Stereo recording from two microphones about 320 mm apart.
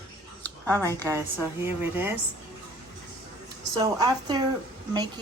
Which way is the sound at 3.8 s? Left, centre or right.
Centre.